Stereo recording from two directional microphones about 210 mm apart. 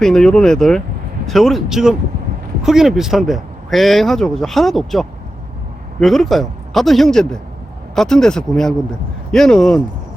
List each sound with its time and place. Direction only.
0.0 s speech: 5° left (ahead or behind)